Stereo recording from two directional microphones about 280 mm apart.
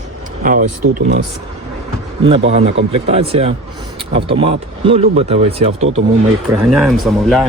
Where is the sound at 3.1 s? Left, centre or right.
Right.